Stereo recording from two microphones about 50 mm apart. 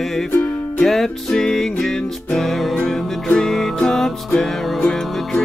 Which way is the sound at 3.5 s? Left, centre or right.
Centre.